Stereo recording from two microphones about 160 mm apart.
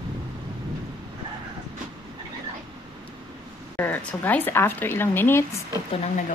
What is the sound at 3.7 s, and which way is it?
Speech, 10° left (ahead or behind).